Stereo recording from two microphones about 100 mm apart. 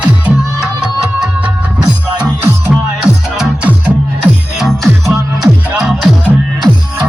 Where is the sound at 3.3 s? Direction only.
5° right (ahead or behind).